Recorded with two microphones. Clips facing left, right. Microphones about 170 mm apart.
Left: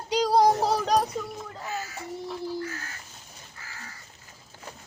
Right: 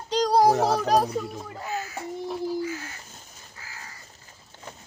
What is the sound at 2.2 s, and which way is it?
Crow, 20° right (ahead or behind).